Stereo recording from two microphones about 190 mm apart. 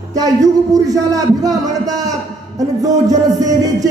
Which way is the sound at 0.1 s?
20° right (ahead or behind).